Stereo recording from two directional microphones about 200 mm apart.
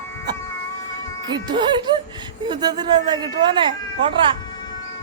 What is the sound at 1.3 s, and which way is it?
Speech, 20° right (ahead or behind).